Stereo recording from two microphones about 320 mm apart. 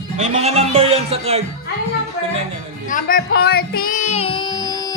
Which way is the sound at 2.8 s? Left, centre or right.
Left.